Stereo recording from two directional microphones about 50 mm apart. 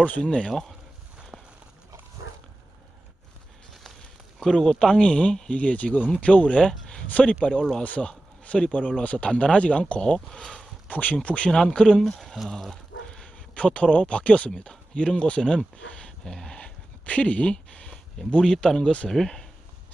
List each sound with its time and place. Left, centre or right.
0.2 s speech: centre
4.4 s a man's voice: centre
5.6 s a man's voice: left; by 10.7 s centre
10.9 s a man's voice: left
11.5 s a man's voice: centre
16.5 s a sound: left
18.6 s a man's voice: centre
19.0 s speech: centre